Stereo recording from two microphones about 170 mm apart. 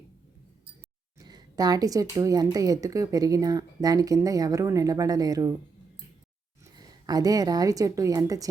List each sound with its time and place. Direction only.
1.2 s a woman's voice: 25° right (ahead or behind)
6.7 s a woman's voice: 20° right (ahead or behind)